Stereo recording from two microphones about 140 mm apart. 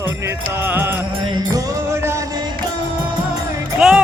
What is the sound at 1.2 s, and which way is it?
Music, 30° right (ahead or behind).